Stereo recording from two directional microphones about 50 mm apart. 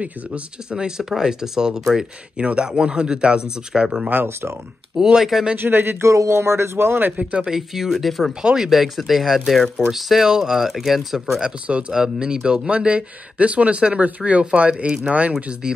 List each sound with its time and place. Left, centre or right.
0.0 s speech: centre
2.4 s speech: right
4.1 s speech: right
4.9 s speech: centre
5.6 s speech: right
6.0 s speech: right
7.2 s speech: right
7.4 s speech: centre
11.9 s speech: centre; by 15.3 s right